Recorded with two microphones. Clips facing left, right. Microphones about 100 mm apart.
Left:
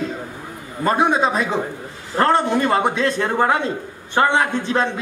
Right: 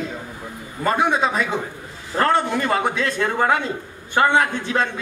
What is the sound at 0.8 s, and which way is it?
A man's voice, 30° left (ahead or behind).